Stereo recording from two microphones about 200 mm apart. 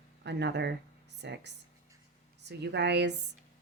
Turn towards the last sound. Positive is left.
turn(degrees=-60)  # may be behind; listen again after turning